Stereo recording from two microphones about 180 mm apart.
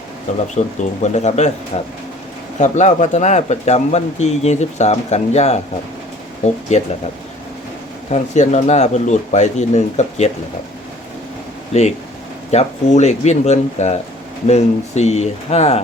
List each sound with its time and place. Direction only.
0.3 s speech: 40° left (ahead or behind)
8.1 s speech: 40° left (ahead or behind)
12.5 s speech: 40° left (ahead or behind)